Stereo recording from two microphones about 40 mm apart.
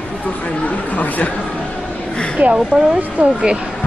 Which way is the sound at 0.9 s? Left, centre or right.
Left.